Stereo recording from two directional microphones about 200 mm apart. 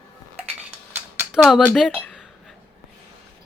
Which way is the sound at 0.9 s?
5° right (ahead or behind).